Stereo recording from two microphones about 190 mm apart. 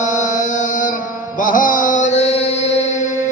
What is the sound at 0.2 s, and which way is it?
Mantra, 40° left (ahead or behind).